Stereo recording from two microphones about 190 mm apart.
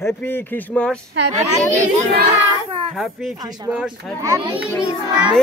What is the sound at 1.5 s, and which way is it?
Speech, 40° right (ahead or behind).